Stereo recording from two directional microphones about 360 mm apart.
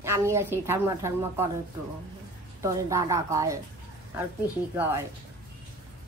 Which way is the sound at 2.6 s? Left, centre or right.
Centre.